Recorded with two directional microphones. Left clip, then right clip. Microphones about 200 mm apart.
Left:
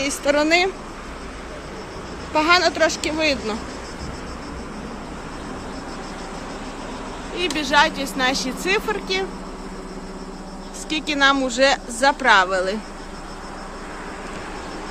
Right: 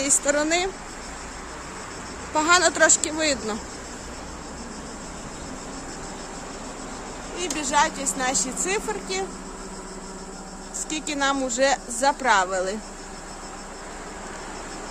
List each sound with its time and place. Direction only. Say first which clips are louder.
0.0 s speech: left 2 dB; 15° right (ahead or behind)
0.3 s speech: left 6 dB; 5° right (ahead or behind)
2.3 s speech: left 2 dB; 15° right (ahead or behind)
7.3 s speech: left 5 dB; 5° right (ahead or behind)
10.8 s speech: left 7 dB; 10° right (ahead or behind)